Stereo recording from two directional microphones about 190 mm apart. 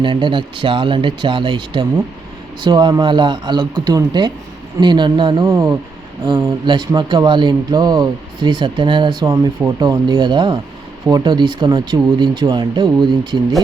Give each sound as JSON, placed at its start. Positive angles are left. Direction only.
{"t": 0.0, "sound": "speech", "side_deg": -25}